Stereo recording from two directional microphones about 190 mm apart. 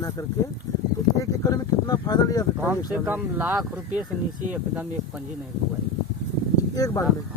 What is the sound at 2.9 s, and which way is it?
Speech, 10° right (ahead or behind).